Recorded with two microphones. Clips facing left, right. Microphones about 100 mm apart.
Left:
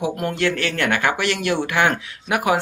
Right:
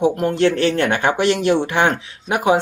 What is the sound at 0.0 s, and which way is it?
Speech, 30° right (ahead or behind).